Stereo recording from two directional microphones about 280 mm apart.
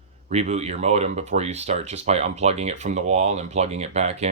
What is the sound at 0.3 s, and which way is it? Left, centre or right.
Speech, right.